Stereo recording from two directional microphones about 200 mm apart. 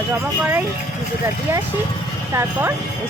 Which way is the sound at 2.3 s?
10° right (ahead or behind).